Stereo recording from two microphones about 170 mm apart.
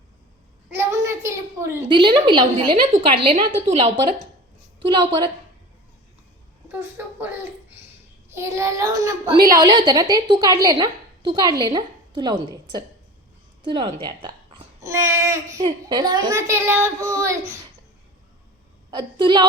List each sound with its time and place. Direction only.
0.8 s a sound: 15° right (ahead or behind)
1.9 s a woman's voice: 30° right (ahead or behind)
4.8 s a woman's voice: 25° right (ahead or behind)
6.7 s a child's voice: 10° right (ahead or behind)
18.9 s a woman's voice: 30° right (ahead or behind)